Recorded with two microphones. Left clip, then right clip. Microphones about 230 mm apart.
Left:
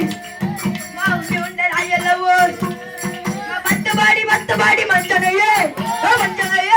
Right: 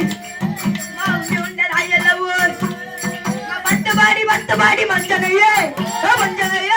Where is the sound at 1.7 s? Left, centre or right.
Left.